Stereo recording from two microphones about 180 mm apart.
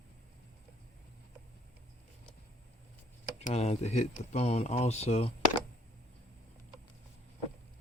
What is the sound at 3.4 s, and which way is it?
Speech, 35° left (ahead or behind).